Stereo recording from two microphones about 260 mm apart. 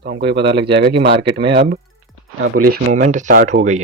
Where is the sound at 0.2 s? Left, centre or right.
Right.